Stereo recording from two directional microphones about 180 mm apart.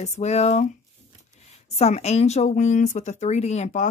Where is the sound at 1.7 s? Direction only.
35° left (ahead or behind).